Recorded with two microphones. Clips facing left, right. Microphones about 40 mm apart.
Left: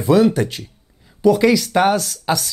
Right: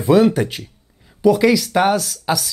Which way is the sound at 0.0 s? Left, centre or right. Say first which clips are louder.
Right 1 dB; right.